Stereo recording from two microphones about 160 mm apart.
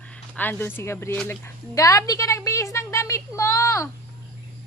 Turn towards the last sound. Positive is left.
turn(degrees=20)  # may be behind; listen again after turning